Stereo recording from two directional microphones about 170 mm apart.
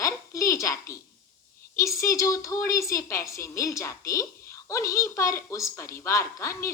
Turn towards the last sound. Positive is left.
turn(degrees=15)  # may be behind; listen again after turning